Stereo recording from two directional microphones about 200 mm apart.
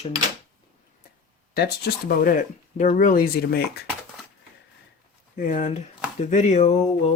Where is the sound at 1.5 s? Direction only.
50° left (ahead or behind).